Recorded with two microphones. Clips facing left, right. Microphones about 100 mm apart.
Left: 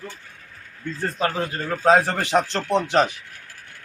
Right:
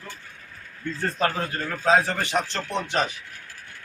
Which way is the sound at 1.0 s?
10° left (ahead or behind).